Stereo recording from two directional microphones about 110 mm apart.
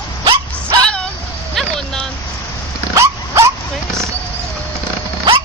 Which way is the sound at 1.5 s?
5° left (ahead or behind).